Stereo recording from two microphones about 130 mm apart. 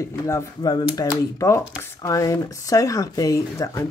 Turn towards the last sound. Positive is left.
turn(degrees=25)  # may be behind; listen again after turning